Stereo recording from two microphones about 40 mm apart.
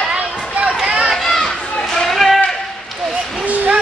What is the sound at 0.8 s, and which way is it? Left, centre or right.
Run, right.